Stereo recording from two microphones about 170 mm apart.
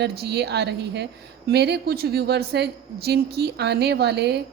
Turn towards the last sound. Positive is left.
turn(degrees=-75)  # may be behind; listen again after turning